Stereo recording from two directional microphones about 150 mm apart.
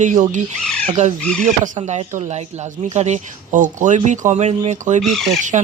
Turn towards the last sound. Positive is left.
turn(degrees=-50)  # may be behind; listen again after turning